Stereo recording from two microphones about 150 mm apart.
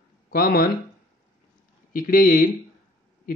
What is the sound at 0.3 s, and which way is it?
Speech, 80° left.